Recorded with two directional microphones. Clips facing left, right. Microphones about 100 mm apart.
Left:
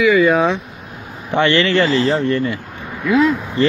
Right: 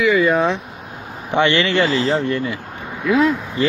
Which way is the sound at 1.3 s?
20° right (ahead or behind).